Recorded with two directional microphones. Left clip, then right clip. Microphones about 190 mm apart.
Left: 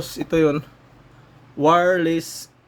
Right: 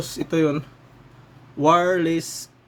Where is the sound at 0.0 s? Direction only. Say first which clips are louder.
Left 3 dB; 15° left (ahead or behind).